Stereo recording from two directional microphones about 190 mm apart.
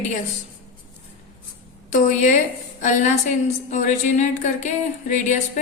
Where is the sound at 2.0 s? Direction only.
40° left (ahead or behind).